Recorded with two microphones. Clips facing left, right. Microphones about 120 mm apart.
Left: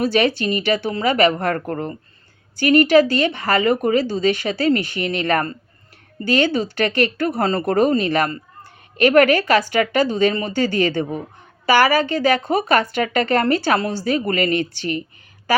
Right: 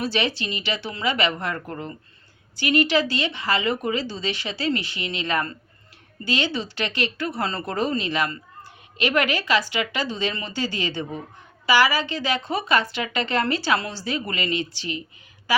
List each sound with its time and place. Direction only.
0.0 s a woman's voice: 50° left (ahead or behind)